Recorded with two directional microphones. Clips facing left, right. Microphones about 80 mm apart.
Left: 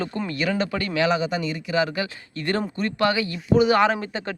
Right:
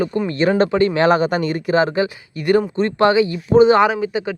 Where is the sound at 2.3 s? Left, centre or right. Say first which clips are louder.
Right 9 dB; centre.